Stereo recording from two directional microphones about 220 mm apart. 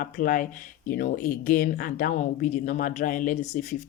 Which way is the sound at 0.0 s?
40° left (ahead or behind).